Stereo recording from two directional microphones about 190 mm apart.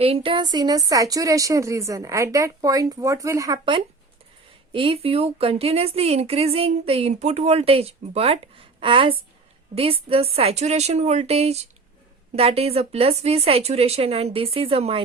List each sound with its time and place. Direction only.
0.0 s a woman's voice: 30° right (ahead or behind)